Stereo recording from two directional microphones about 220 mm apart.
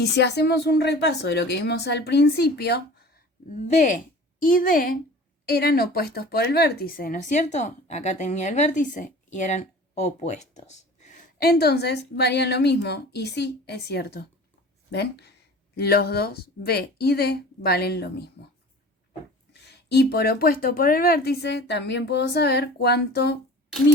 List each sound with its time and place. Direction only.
0.0 s speech: 50° left (ahead or behind)
3.5 s a woman's voice: 35° left (ahead or behind)
19.5 s speech: 50° left (ahead or behind)